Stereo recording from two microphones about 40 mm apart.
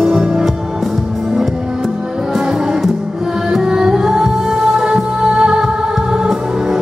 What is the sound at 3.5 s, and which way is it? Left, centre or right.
Music, centre.